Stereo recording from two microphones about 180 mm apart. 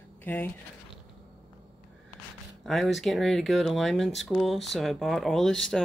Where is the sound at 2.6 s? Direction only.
Centre (ahead or behind).